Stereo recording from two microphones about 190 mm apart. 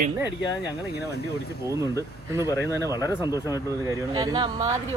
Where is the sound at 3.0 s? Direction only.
20° left (ahead or behind).